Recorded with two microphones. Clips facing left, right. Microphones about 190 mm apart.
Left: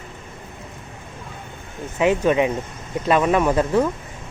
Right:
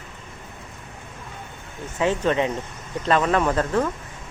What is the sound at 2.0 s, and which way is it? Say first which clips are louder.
A woman's voice: left 4 dB; 15° left (ahead or behind).